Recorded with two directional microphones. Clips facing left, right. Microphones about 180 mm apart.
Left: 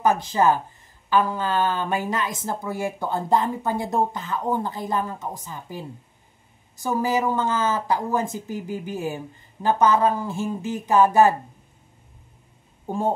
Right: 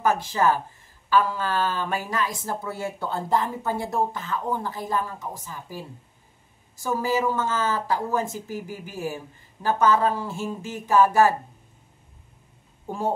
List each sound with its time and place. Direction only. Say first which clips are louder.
0.0 s speech: left 2 dB; 20° left (ahead or behind)
12.8 s speech: left 3 dB; 20° left (ahead or behind)